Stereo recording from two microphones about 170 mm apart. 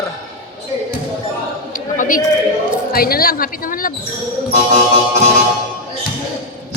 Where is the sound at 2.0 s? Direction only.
50° left (ahead or behind).